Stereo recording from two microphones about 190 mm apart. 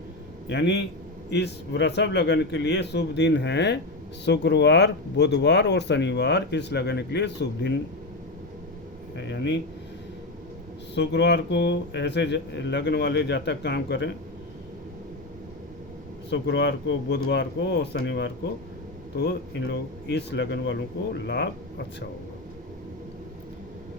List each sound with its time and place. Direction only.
0.4 s speech: 65° left (ahead or behind)
9.1 s speech: 70° left (ahead or behind)
10.9 s speech: 65° left (ahead or behind)
16.3 s speech: 65° left (ahead or behind)